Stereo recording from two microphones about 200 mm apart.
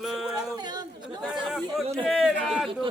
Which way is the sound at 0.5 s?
20° right (ahead or behind).